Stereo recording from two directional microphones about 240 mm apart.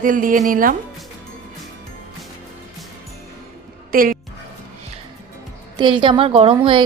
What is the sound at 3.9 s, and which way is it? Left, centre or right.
Speech, right.